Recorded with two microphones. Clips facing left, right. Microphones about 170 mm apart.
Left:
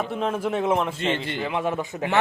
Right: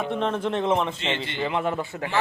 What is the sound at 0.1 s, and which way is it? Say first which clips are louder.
Speech: even; 5° left (ahead or behind).